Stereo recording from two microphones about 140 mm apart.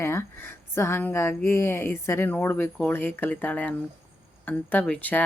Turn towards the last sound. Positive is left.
turn(degrees=10)  # may be behind; listen again after turning